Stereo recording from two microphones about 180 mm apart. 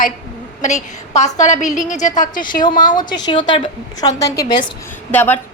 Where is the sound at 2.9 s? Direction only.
25° left (ahead or behind).